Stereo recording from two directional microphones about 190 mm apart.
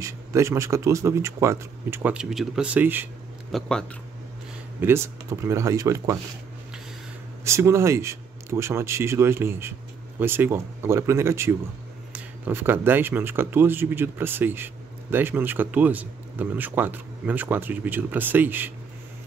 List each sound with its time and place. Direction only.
0.0 s speech: 15° right (ahead or behind)
3.5 s speech: 5° left (ahead or behind)
4.7 s speech: 15° right (ahead or behind)
7.4 s speech: 15° right (ahead or behind)